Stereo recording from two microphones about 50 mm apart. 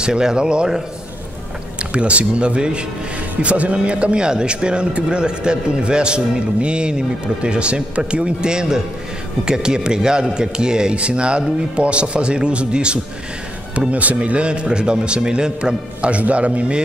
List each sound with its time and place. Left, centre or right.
0.0 s a man's voice: centre